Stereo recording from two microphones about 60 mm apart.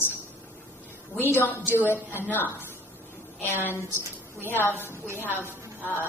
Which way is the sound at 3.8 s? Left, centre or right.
Left.